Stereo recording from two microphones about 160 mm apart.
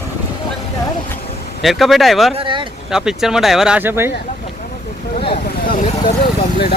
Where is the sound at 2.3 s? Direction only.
30° right (ahead or behind).